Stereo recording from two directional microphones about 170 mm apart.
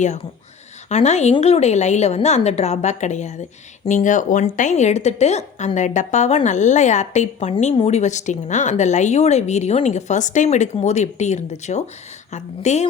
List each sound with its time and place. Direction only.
0.9 s a woman's voice: 40° left (ahead or behind)